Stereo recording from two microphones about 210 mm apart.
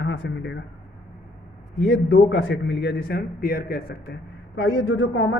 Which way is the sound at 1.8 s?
60° left (ahead or behind).